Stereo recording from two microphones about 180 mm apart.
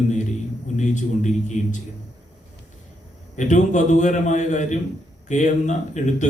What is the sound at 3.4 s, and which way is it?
A man's voice, 45° left (ahead or behind).